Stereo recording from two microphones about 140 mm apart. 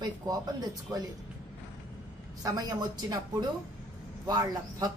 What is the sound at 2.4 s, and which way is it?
Speech, 25° right (ahead or behind).